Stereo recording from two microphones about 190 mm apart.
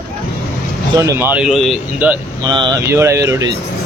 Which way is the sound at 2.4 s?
20° right (ahead or behind).